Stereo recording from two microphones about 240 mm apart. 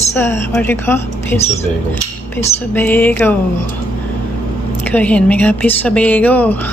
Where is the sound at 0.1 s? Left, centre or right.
Centre.